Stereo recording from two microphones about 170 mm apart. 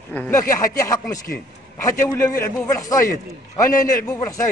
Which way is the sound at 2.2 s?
20° left (ahead or behind).